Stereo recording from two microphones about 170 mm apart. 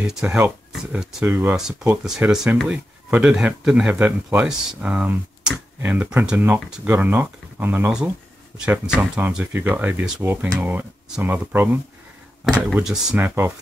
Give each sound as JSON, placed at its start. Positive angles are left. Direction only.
{"t": 0.0, "sound": "speech", "side_deg": -5}